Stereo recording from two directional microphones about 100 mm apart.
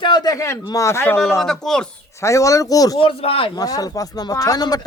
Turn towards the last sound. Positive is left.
turn(degrees=40)  # may be behind; listen again after turning